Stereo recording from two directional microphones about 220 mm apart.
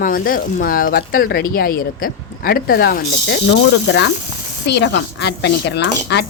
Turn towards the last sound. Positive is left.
turn(degrees=50)  # may be behind; listen again after turning